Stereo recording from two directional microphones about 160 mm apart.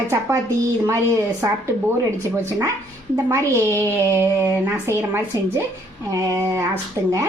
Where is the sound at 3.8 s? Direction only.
15° right (ahead or behind).